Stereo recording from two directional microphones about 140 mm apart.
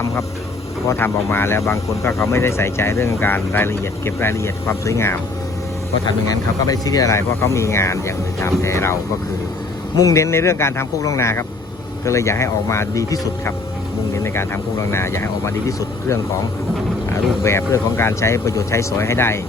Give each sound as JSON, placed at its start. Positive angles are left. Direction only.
{"t": 0.9, "sound": "speech", "side_deg": 15}
{"t": 10.0, "sound": "speech", "side_deg": 20}
{"t": 17.4, "sound": "speech", "side_deg": 20}